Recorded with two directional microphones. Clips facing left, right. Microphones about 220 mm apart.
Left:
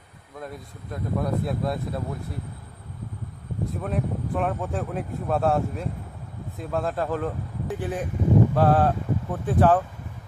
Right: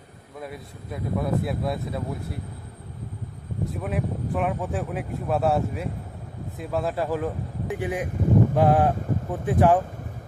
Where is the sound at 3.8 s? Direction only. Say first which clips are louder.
Even; centre (ahead or behind).